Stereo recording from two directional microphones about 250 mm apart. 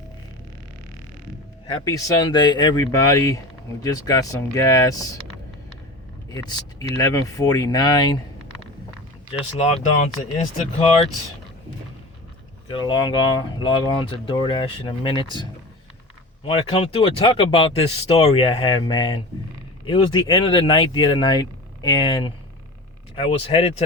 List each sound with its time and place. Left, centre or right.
1.7 s speech: centre
6.3 s speech: centre
9.6 s speech: left
12.6 s speech: centre